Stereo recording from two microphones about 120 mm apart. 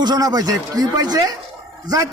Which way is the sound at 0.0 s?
35° right (ahead or behind).